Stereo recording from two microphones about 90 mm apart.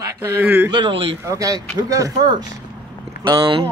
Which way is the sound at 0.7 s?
80° right.